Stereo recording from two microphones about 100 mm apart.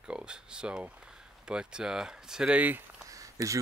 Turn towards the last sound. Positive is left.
turn(degrees=-30)  # may be behind; listen again after turning